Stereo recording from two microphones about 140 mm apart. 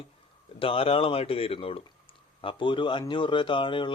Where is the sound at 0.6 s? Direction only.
40° left (ahead or behind).